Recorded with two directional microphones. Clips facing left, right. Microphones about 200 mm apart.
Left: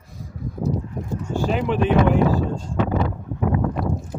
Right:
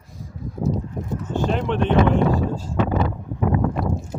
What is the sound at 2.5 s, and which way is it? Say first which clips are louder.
Speech: even; 5° right (ahead or behind).